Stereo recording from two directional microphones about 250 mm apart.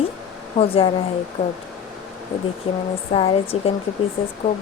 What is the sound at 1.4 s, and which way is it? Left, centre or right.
Speech, left.